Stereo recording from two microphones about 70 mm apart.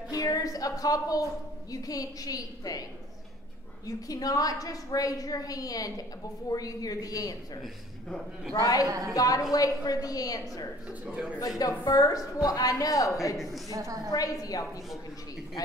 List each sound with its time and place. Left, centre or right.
0.1 s a woman's voice: left
3.8 s a woman's voice: left
8.5 s a woman's voice: left
8.8 s a woman's voice: right
9.1 s a woman's voice: left
10.9 s a man's voice: centre
11.3 s a woman's voice: left
13.7 s a woman's voice: right
14.1 s a woman's voice: left